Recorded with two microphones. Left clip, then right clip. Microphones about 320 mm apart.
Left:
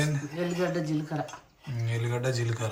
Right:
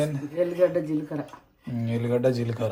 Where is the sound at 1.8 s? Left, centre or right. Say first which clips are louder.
Right 8 dB; centre.